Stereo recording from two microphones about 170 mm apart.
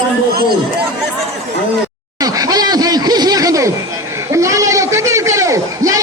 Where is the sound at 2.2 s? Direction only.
20° right (ahead or behind).